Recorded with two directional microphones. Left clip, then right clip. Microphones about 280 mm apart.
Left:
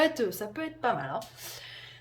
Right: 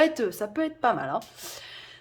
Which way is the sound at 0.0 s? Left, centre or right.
Centre.